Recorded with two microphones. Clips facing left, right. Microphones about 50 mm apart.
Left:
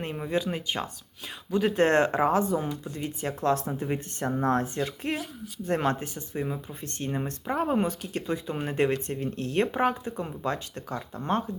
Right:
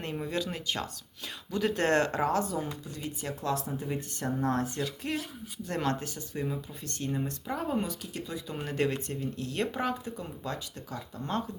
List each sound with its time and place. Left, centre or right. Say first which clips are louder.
0.0 s speech: left 4 dB; centre
6.8 s speech: left 2 dB; left
8.5 s speech: left 3 dB; left